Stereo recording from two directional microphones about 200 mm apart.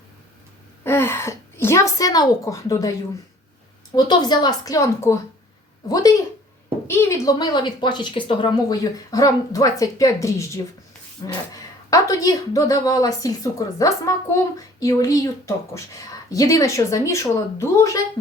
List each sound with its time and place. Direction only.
0.9 s speech: 10° left (ahead or behind)
3.9 s a woman's voice: 20° left (ahead or behind)